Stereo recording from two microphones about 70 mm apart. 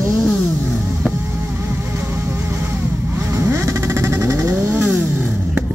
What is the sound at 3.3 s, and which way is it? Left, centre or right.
Vehicle, right.